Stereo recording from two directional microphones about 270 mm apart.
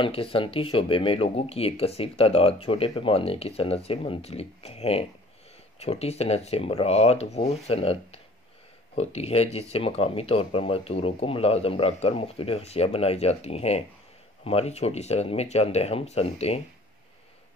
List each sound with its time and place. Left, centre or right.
0.0 s speech: centre